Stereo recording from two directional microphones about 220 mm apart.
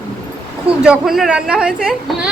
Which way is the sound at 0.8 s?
5° right (ahead or behind).